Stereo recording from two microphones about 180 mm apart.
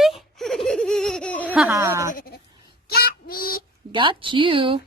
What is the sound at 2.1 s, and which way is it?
Bleat, 55° left (ahead or behind).